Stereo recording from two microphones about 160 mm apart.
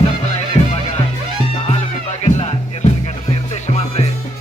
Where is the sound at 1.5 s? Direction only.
40° left (ahead or behind).